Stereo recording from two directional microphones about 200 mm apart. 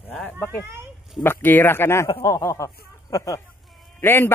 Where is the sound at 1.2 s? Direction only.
10° left (ahead or behind).